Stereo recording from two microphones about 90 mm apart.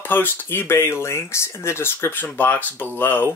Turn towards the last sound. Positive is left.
turn(degrees=25)  # may be behind; listen again after turning